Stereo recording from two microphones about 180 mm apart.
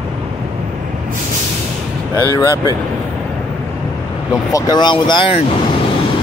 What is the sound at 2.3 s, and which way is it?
Speech, 20° left (ahead or behind).